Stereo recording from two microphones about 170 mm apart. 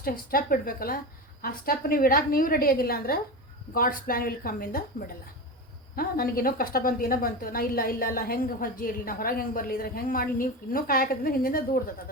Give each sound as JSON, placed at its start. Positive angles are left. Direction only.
{"t": 0.0, "sound": "a woman's voice", "side_deg": 60}